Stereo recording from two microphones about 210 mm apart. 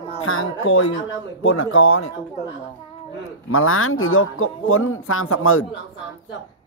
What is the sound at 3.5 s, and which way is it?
A man's voice, 80° left.